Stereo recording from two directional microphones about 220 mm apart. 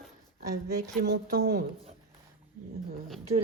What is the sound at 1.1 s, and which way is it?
Speech, 40° right (ahead or behind).